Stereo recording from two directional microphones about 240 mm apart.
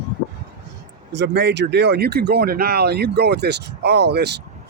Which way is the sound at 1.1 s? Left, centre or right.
Right.